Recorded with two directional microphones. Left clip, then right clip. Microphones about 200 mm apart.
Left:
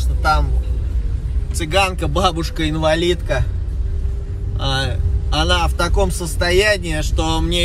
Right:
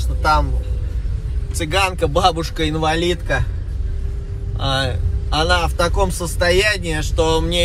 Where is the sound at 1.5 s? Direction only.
5° left (ahead or behind).